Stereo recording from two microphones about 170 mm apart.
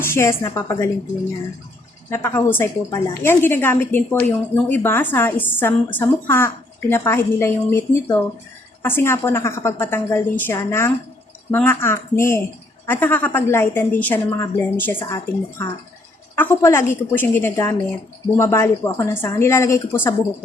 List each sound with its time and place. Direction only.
0.0 s a woman's voice: 15° left (ahead or behind)
2.0 s a woman's voice: 15° left (ahead or behind)